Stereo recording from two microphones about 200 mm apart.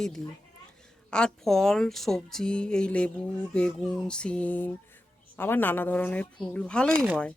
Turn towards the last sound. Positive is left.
turn(degrees=5)  # may be behind; listen again after turning